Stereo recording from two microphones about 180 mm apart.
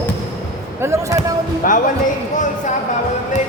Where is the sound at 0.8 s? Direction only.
15° right (ahead or behind).